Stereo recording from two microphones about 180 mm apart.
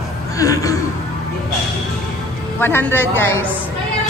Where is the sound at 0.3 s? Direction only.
20° left (ahead or behind).